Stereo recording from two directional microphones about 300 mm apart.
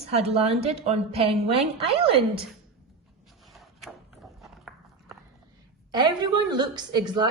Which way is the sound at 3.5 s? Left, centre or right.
Centre.